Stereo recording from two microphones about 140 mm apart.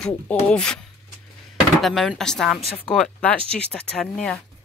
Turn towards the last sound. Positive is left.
turn(degrees=5)  # may be behind; listen again after turning